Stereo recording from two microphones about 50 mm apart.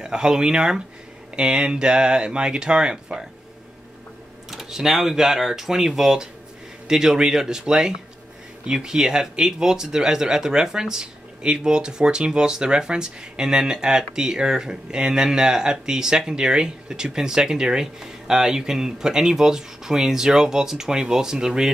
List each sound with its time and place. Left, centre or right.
0.0 s speech: centre
4.5 s speech: centre